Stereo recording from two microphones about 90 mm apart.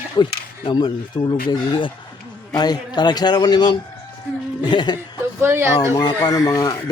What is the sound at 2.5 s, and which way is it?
A man's voice, 50° left (ahead or behind).